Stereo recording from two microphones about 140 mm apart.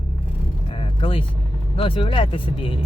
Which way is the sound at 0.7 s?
40° left (ahead or behind).